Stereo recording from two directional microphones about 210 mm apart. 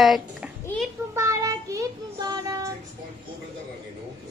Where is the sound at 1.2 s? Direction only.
15° right (ahead or behind).